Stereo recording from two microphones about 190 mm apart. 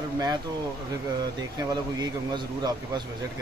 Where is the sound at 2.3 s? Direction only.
25° right (ahead or behind).